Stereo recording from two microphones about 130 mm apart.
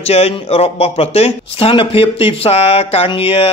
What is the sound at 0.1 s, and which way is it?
Speech, 50° left (ahead or behind).